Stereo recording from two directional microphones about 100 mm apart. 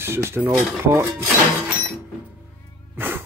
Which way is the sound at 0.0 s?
25° right (ahead or behind).